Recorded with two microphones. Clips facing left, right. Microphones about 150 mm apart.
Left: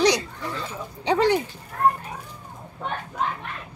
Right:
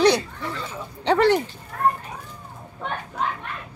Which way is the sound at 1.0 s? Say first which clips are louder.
Right 2 dB; 15° left (ahead or behind).